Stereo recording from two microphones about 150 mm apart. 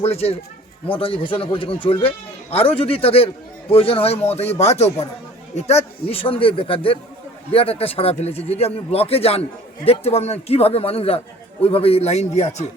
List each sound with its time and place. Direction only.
0.0 s a man's voice: 45° left (ahead or behind)